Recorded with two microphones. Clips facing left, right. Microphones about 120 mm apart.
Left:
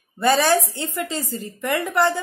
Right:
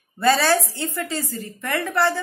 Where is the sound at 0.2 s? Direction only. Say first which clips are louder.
Left 1 dB; 15° left (ahead or behind).